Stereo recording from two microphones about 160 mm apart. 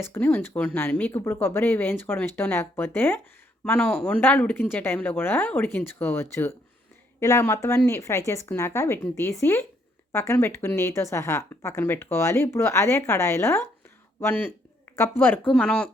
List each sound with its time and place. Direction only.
0.0 s speech: 15° left (ahead or behind)